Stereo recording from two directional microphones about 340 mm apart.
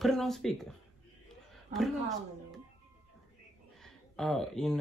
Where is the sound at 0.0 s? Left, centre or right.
Centre.